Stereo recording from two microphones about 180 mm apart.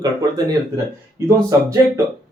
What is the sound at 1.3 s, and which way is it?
Speech, 15° right (ahead or behind).